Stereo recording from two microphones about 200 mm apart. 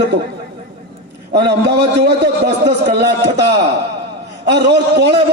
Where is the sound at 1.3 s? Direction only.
55° right (ahead or behind).